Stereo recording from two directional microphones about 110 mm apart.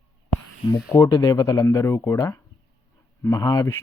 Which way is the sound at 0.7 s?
25° left (ahead or behind).